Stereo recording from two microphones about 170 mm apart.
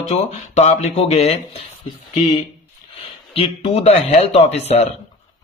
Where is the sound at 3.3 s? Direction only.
35° left (ahead or behind).